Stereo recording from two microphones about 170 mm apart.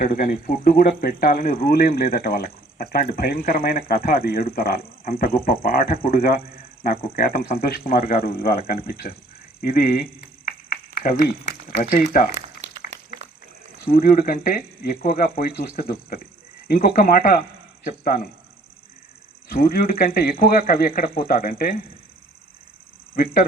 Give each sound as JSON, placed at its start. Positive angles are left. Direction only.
{"t": 0.0, "sound": "speech", "side_deg": 55}
{"t": 12.3, "sound": "a sound", "side_deg": -40}
{"t": 13.8, "sound": "speech", "side_deg": 60}
{"t": 19.5, "sound": "speech", "side_deg": 60}
{"t": 23.1, "sound": "speech", "side_deg": 60}